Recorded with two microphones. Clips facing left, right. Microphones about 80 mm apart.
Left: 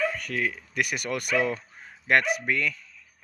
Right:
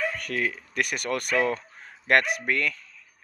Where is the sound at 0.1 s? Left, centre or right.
Centre.